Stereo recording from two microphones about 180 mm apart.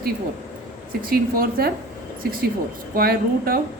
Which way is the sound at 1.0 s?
55° right (ahead or behind).